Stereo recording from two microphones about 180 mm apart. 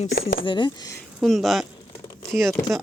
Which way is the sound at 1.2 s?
Centre (ahead or behind).